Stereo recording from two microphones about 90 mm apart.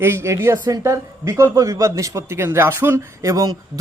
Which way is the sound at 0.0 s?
30° right (ahead or behind).